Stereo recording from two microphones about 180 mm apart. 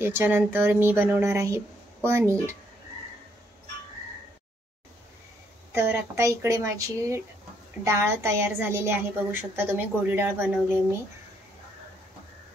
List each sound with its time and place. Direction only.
0.0 s a woman's voice: 10° right (ahead or behind)
5.8 s a woman's voice: 15° right (ahead or behind)